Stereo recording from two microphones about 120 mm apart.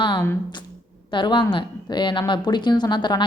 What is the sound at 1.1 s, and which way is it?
A woman's voice, 40° left (ahead or behind).